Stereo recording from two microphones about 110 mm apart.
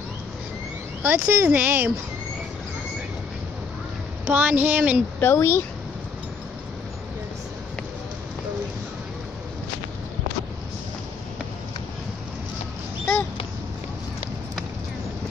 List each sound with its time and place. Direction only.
1.0 s speech: 15° right (ahead or behind)
4.3 s speech: 15° right (ahead or behind)
5.2 s speech: 20° left (ahead or behind)